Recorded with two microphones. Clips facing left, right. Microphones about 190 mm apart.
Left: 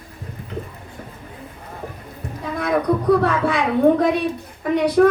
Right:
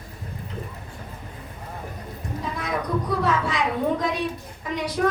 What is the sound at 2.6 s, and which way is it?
A child's voice, 60° left (ahead or behind).